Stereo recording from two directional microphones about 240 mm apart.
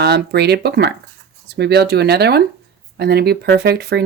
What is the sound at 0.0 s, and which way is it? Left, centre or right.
Speech, right.